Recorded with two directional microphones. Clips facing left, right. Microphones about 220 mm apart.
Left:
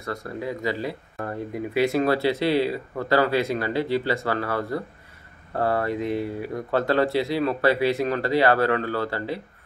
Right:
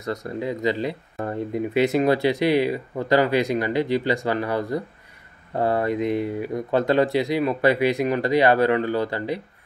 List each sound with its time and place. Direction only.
0.0 s speech: 20° right (ahead or behind)